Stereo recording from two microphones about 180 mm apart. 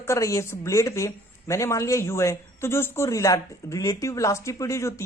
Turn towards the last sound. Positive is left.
turn(degrees=15)  # may be behind; listen again after turning